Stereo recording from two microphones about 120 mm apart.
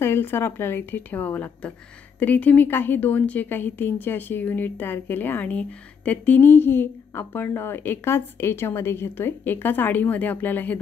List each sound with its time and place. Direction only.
0.0 s a woman's voice: 20° left (ahead or behind)